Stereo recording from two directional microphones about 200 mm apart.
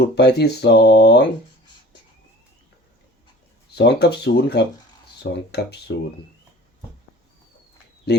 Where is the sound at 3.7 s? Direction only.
55° left (ahead or behind).